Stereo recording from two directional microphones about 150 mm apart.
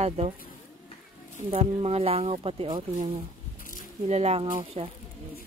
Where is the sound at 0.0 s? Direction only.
45° right (ahead or behind).